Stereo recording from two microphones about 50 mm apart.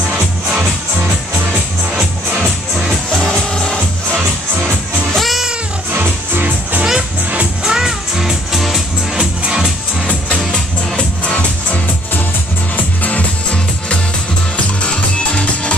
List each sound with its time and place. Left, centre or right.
2.0 s music: centre
3.3 s music: centre
5.1 s music: centre
5.9 s music: right
6.8 s music: centre
9.2 s music: centre
11.3 s music: left